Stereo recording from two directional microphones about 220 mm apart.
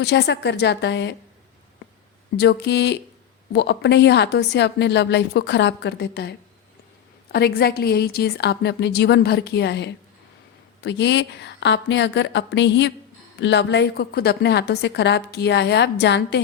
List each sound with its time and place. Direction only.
0.0 s a woman's voice: 50° left (ahead or behind)
2.3 s a woman's voice: 50° left (ahead or behind)
7.3 s a woman's voice: 45° left (ahead or behind)